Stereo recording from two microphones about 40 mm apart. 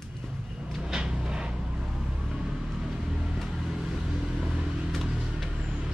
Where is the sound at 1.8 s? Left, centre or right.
Centre.